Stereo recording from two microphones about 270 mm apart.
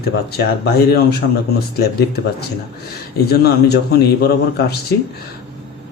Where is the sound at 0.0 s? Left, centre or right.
Left.